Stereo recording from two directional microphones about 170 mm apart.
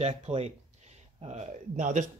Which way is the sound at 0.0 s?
40° right (ahead or behind).